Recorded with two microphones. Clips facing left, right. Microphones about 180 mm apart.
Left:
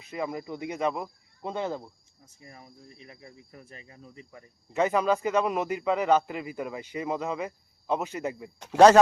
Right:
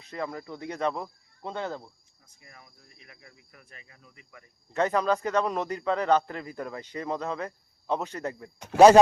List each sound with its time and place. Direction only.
0.0 s a man's voice: 10° left (ahead or behind)
2.2 s cricket: 30° left (ahead or behind)
4.7 s a man's voice: 10° left (ahead or behind)
8.6 s speech: 5° right (ahead or behind)